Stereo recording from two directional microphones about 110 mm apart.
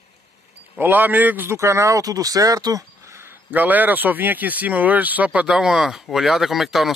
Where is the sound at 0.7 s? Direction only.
15° right (ahead or behind).